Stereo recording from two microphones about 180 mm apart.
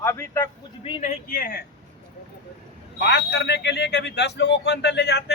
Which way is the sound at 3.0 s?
65° left (ahead or behind).